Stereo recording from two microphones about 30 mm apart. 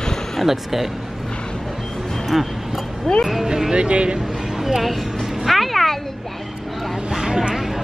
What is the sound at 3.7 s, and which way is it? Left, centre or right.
Speech, right.